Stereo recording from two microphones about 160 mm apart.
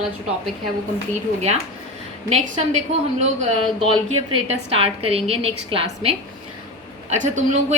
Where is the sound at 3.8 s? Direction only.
35° right (ahead or behind).